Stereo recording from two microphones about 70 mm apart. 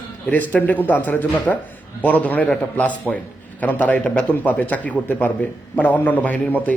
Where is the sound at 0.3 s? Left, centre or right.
Left.